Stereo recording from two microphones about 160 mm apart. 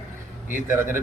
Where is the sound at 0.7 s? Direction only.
15° right (ahead or behind).